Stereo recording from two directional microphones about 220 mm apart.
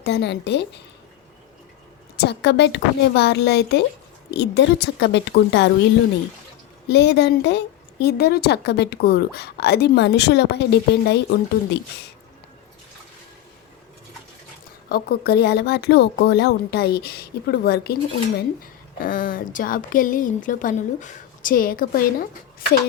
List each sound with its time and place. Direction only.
0.0 s speech: 50° left (ahead or behind)
2.1 s speech: 50° left (ahead or behind)
6.8 s speech: 50° left (ahead or behind)
14.8 s a woman's voice: 45° left (ahead or behind)